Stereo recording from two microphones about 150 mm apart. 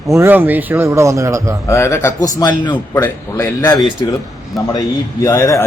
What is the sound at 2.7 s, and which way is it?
A man's voice, 15° left (ahead or behind).